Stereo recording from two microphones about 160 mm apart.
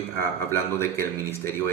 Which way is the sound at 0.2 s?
15° left (ahead or behind).